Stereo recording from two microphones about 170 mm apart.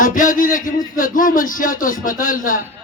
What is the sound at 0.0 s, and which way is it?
Speech, 50° left (ahead or behind).